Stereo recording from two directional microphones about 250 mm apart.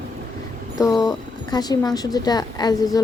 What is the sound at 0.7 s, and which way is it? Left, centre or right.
A woman's voice, centre.